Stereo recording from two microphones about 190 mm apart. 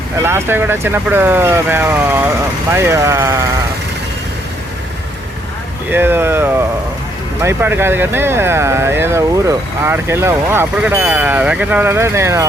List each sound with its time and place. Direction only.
0.2 s speech: 10° right (ahead or behind)
5.9 s speech: 10° right (ahead or behind)